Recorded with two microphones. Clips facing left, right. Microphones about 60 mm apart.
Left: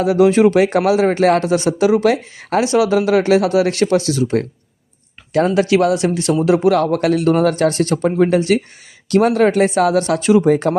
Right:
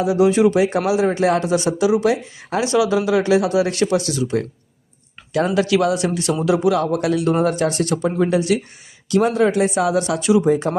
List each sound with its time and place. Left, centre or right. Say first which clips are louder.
0.0 s speech: left 3 dB; left
1.5 s speech: left 3 dB; left
2.7 s speech: left 2 dB; left
5.5 s speech: left 2 dB; left
6.7 s speech: left 3 dB; left
9.5 s speech: left 4 dB; left
10.5 s speech: left 3 dB; left